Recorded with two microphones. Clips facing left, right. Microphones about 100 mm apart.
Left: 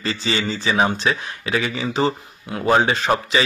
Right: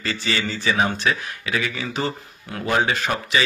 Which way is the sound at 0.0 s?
25° left (ahead or behind).